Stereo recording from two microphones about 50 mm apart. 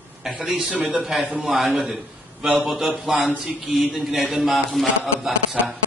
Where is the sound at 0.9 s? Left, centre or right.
Centre.